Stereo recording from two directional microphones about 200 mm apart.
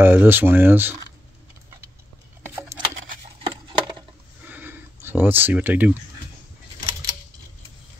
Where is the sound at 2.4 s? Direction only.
15° right (ahead or behind).